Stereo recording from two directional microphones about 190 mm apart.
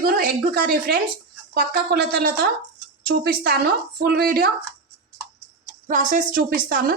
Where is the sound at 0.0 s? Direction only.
50° right (ahead or behind).